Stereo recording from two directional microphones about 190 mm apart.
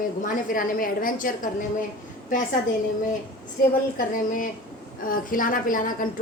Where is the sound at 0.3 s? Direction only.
45° left (ahead or behind).